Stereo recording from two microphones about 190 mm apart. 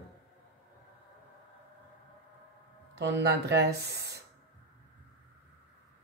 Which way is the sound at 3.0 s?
65° right (ahead or behind).